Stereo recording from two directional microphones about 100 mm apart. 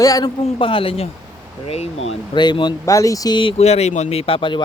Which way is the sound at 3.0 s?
35° left (ahead or behind).